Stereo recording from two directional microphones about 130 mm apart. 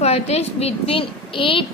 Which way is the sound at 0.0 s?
55° left (ahead or behind).